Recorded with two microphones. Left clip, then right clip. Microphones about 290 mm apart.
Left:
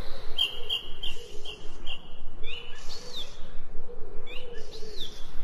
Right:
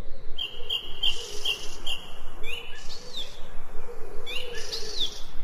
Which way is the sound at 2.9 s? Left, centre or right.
Centre.